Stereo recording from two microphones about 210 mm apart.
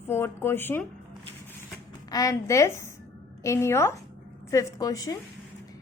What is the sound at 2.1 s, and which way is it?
A woman's voice, 15° left (ahead or behind).